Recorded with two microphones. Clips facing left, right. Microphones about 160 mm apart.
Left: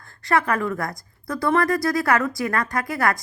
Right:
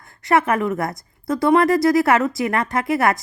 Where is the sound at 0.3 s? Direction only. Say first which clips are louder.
Right 4 dB; 20° right (ahead or behind).